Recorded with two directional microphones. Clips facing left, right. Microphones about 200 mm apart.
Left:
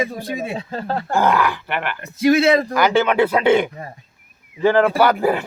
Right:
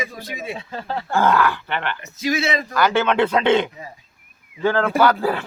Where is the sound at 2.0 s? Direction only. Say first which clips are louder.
Left 11 dB; 55° left (ahead or behind).